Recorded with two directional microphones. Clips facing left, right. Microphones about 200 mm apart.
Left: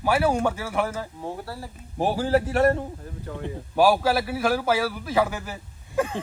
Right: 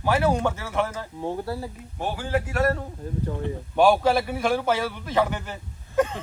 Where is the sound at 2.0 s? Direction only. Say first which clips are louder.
Left 5 dB; 35° left (ahead or behind).